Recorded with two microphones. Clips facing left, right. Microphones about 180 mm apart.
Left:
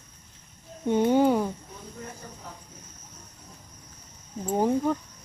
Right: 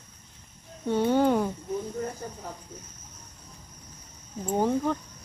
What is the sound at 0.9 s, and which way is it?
Speech, 15° left (ahead or behind).